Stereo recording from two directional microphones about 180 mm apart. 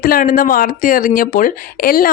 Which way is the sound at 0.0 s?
50° left (ahead or behind).